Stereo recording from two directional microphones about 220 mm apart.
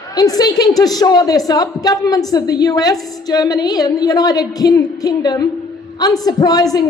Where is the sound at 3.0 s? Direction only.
Centre (ahead or behind).